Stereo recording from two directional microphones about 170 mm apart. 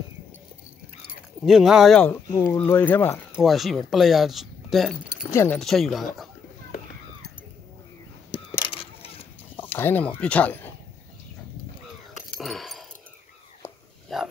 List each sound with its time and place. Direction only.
1.4 s speech: centre (ahead or behind)
2.0 s speech: 15° left (ahead or behind)
3.3 s speech: 5° right (ahead or behind)
5.3 s speech: 15° left (ahead or behind)
5.6 s speech: centre (ahead or behind)
8.3 s a sound: 25° left (ahead or behind)
9.6 s speech: 10° left (ahead or behind)
12.4 s a sound: centre (ahead or behind)
14.0 s a sound: centre (ahead or behind)